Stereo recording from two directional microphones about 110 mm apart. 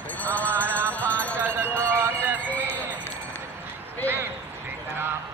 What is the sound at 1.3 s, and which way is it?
Music, 15° right (ahead or behind).